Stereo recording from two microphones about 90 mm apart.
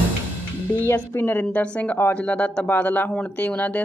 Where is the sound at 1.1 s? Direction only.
25° left (ahead or behind).